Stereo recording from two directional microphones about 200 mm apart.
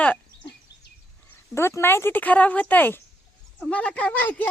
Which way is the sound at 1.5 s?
10° left (ahead or behind).